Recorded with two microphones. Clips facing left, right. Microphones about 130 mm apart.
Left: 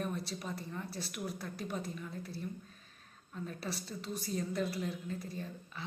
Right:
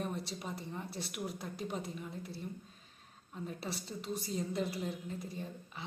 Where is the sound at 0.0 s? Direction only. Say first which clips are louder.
Left 1 dB; 20° right (ahead or behind).